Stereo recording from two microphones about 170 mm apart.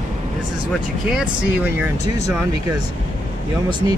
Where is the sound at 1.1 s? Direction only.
5° right (ahead or behind).